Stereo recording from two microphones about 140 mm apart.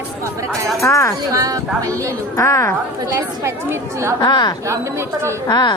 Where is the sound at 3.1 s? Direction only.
20° right (ahead or behind).